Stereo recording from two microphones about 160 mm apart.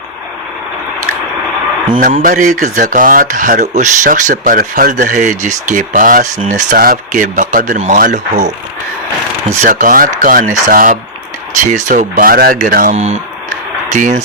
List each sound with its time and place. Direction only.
2.0 s speech: 60° right (ahead or behind)
9.6 s speech: 55° right (ahead or behind)